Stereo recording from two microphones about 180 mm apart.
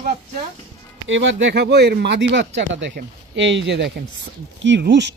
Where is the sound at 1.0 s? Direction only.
90° right.